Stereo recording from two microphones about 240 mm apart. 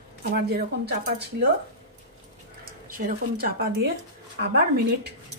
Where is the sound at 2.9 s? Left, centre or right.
Right.